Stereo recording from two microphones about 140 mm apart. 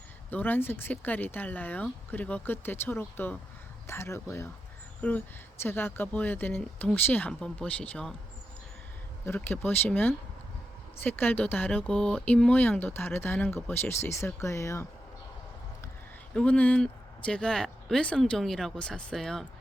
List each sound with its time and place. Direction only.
0.3 s speech: 10° left (ahead or behind)
5.0 s speech: 10° left (ahead or behind)
9.2 s speech: 15° left (ahead or behind)
16.3 s speech: 10° left (ahead or behind)